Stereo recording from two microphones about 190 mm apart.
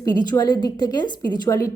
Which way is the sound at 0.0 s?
20° left (ahead or behind).